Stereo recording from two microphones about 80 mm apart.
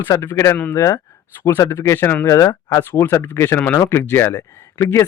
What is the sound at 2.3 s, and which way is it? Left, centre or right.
A man's voice, left.